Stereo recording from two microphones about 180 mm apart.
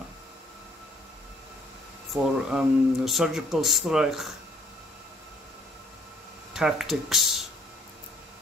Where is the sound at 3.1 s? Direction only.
Centre (ahead or behind).